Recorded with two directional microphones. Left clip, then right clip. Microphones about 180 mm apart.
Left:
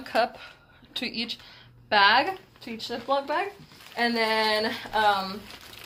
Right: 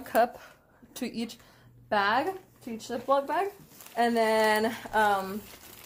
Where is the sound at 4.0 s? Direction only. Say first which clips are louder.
Even; 60° right (ahead or behind).